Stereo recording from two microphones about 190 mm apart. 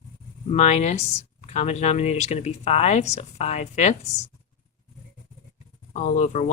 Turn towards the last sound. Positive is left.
turn(degrees=35)  # may be behind; listen again after turning